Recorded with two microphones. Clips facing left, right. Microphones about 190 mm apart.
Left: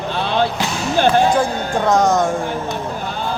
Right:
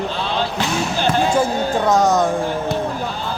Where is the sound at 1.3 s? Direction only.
5° right (ahead or behind).